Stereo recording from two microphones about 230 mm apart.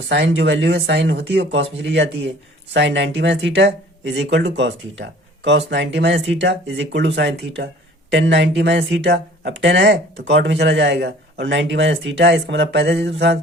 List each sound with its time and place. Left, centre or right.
0.1 s speech: right